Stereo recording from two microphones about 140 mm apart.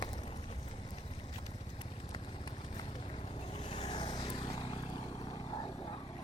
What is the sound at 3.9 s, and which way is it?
Vehicle, 35° left (ahead or behind).